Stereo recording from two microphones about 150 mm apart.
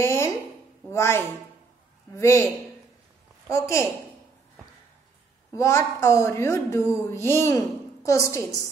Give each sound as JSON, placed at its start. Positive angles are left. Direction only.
{"t": 0.0, "sound": "a sound", "side_deg": 20}
{"t": 0.8, "sound": "a woman's voice", "side_deg": 15}
{"t": 3.4, "sound": "a woman's voice", "side_deg": 20}
{"t": 5.5, "sound": "a woman's voice", "side_deg": 20}